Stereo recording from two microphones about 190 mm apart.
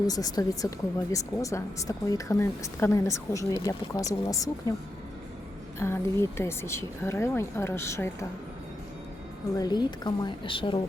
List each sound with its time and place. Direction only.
0.1 s a woman's voice: 20° left (ahead or behind)
5.8 s a woman's voice: 15° left (ahead or behind)
9.6 s speech: 20° left (ahead or behind)